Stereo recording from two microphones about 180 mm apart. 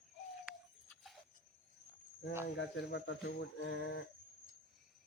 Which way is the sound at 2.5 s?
70° left (ahead or behind).